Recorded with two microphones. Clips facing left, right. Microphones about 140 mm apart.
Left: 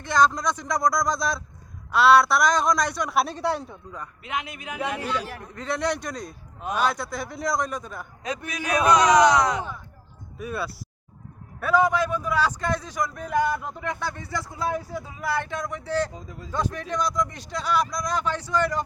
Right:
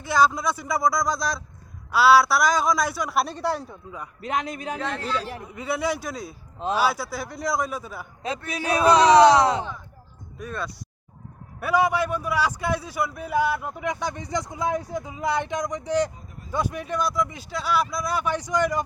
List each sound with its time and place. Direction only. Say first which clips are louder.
0.0 s a man's voice: even; 5° right (ahead or behind)
4.2 s speech: right 5 dB; 40° right (ahead or behind)
4.8 s speech: left 5 dB; 10° left (ahead or behind)
5.4 s a man's voice: right 1 dB; 10° right (ahead or behind)
8.4 s a man's voice: right 2 dB; 30° right (ahead or behind)
10.3 s speech: left 2 dB; 5° left (ahead or behind)
11.6 s a man's voice: left 1 dB; 10° right (ahead or behind)
16.1 s speech: left 6 dB; 90° left
16.5 s a man's voice: right 1 dB; 10° right (ahead or behind)